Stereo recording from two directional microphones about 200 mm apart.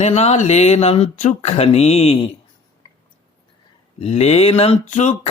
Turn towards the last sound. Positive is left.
turn(degrees=35)  # may be behind; listen again after turning